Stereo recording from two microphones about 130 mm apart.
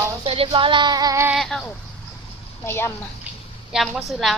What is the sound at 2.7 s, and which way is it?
Speech, 20° left (ahead or behind).